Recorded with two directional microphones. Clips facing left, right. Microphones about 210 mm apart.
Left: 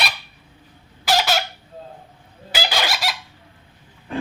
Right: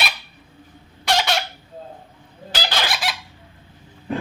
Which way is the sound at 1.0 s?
Centre (ahead or behind).